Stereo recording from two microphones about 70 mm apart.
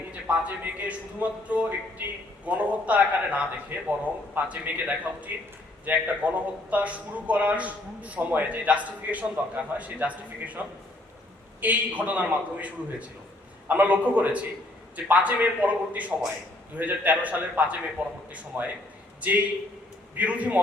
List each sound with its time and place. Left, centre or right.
0.3 s a man's voice: right
11.6 s a man's voice: right
20.1 s a man's voice: right